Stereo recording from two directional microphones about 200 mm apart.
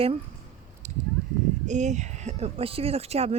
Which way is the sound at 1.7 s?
35° right (ahead or behind).